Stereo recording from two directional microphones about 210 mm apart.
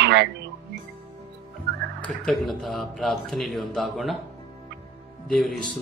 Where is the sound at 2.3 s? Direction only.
Centre (ahead or behind).